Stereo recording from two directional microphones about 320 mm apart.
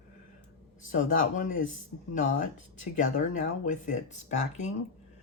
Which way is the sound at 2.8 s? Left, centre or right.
Left.